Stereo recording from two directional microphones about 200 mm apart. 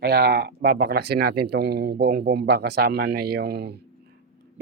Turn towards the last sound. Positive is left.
turn(degrees=-55)  # may be behind; listen again after turning